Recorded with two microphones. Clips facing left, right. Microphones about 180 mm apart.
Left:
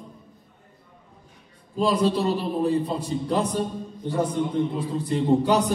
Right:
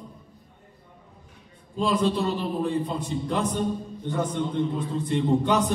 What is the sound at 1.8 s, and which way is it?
A man's voice, 35° left (ahead or behind).